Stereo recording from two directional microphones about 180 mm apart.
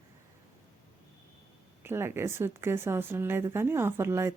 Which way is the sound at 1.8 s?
15° right (ahead or behind).